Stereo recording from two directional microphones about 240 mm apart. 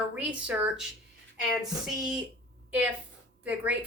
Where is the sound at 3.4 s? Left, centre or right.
Centre.